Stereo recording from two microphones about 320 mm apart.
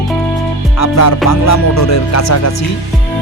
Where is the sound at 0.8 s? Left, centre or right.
Left.